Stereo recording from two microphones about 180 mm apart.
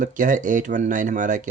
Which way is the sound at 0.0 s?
45° right (ahead or behind).